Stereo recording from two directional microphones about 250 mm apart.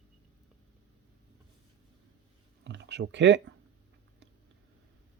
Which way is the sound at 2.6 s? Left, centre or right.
Right.